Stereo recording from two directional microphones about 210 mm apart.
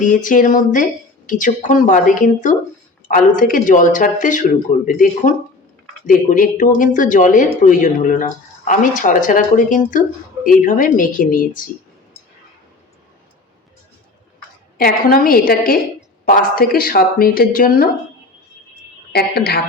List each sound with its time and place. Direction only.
0.0 s speech: 40° left (ahead or behind)
14.8 s speech: 40° left (ahead or behind)
19.1 s speech: 50° left (ahead or behind)